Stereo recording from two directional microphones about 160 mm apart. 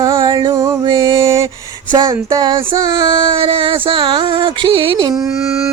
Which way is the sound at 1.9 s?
20° right (ahead or behind).